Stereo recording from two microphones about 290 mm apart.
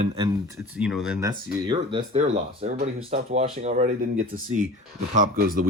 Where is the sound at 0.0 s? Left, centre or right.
Centre.